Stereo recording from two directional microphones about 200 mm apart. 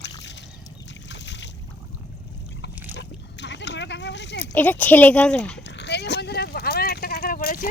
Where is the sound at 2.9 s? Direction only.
60° left (ahead or behind).